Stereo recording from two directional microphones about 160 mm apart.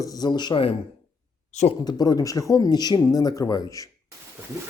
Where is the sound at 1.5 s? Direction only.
50° left (ahead or behind).